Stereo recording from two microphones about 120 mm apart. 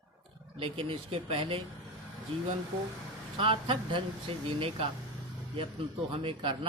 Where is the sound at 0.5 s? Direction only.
50° right (ahead or behind).